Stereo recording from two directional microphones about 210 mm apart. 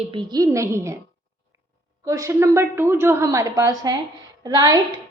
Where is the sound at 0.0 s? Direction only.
25° right (ahead or behind).